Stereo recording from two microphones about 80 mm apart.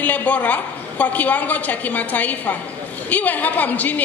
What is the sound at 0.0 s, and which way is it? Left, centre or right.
A woman's voice, centre.